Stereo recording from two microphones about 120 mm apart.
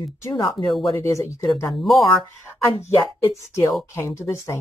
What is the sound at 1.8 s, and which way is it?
Speech, centre (ahead or behind).